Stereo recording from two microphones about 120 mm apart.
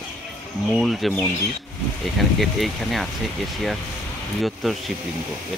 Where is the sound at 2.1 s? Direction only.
Centre (ahead or behind).